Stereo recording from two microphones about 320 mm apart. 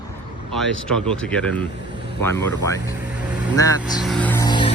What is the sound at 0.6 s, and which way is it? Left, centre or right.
Speech, centre.